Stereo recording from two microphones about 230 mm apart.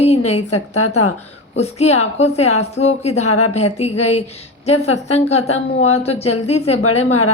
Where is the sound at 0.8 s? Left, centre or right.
Left.